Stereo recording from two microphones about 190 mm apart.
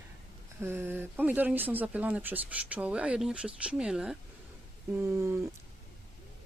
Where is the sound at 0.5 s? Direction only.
10° right (ahead or behind).